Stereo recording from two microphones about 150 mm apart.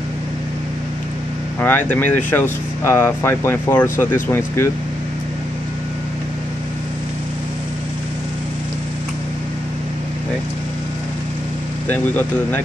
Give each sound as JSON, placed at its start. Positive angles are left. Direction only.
{"t": 1.6, "sound": "speech", "side_deg": 10}
{"t": 11.9, "sound": "speech", "side_deg": 10}